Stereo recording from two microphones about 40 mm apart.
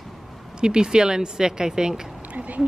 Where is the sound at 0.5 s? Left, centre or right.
Right.